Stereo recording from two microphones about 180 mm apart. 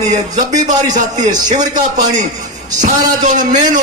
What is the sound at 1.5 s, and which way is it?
A man's voice, 45° right (ahead or behind).